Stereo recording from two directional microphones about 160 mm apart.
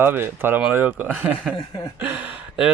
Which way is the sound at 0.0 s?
15° right (ahead or behind).